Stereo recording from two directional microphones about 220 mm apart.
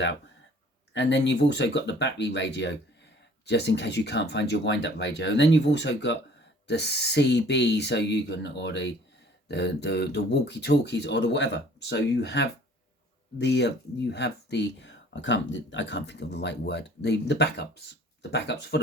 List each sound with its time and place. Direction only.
0.9 s speech: 55° left (ahead or behind)